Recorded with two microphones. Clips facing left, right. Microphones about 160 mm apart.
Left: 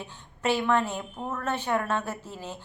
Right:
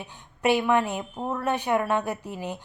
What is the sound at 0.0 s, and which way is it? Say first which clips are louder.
A woman's voice: right 4 dB; 15° right (ahead or behind).